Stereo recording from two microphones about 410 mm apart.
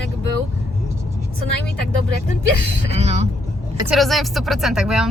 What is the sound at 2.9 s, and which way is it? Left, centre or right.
Speech, centre.